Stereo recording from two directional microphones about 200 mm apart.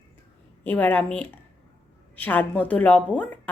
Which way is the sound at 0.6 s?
10° left (ahead or behind).